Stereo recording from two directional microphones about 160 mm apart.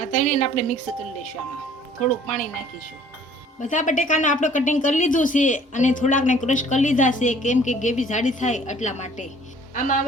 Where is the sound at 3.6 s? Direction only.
50° left (ahead or behind).